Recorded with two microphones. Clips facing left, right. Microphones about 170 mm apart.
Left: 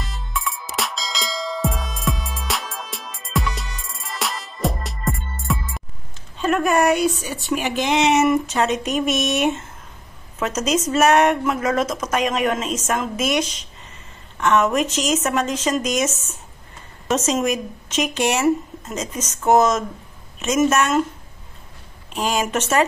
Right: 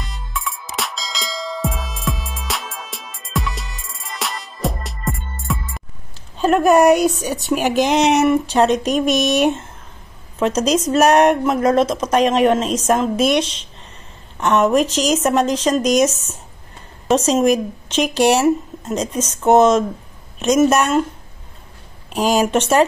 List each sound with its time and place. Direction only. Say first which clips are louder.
0.0 s music: even; centre (ahead or behind)
6.3 s speech: right 6 dB; 35° right (ahead or behind)
22.1 s speech: right 6 dB; 40° right (ahead or behind)